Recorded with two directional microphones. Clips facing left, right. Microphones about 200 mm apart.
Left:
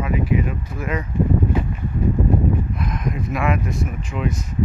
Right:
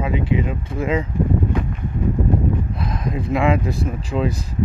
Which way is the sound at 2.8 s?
30° right (ahead or behind).